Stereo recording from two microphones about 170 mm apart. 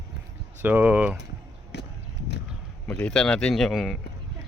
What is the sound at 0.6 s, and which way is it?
Speech, 10° right (ahead or behind).